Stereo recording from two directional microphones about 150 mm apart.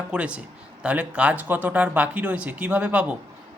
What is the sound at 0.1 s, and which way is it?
Speech, 10° right (ahead or behind).